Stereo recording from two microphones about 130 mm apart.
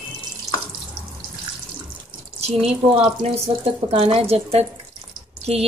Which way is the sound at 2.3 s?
50° right (ahead or behind).